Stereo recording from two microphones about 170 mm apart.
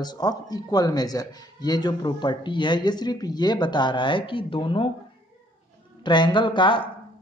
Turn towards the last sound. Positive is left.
turn(degrees=30)  # may be behind; listen again after turning